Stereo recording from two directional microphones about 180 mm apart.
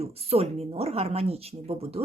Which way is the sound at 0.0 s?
35° right (ahead or behind).